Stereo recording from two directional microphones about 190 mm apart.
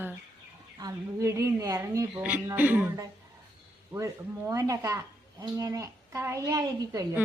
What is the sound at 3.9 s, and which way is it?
Speech, 15° right (ahead or behind).